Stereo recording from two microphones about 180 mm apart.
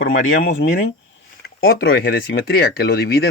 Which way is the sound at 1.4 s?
60° left (ahead or behind).